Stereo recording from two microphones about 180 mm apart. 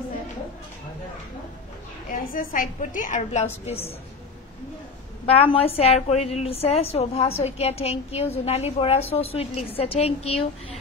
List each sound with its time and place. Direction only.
2.0 s a woman's voice: 50° left (ahead or behind)
5.2 s a woman's voice: 30° left (ahead or behind)